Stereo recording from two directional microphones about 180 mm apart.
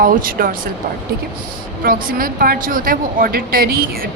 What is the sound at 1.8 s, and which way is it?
Speech, 55° right (ahead or behind).